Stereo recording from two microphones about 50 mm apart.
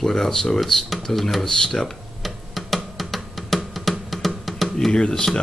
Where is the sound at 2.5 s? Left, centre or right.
Centre.